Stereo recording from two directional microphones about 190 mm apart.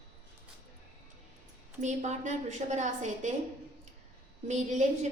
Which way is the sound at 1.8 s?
40° right (ahead or behind).